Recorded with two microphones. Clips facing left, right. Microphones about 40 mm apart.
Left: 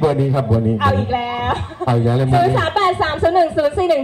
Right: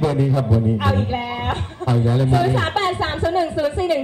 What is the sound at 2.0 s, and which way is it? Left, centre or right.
Speech, centre.